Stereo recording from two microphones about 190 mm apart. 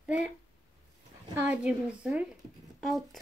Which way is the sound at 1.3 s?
5° right (ahead or behind).